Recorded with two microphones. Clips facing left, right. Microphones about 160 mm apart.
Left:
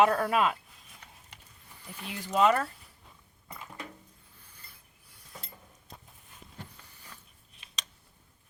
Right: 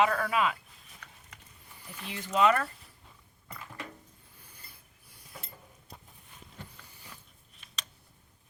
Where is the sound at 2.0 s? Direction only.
5° left (ahead or behind).